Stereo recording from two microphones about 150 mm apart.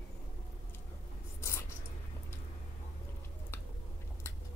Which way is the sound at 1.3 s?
15° left (ahead or behind).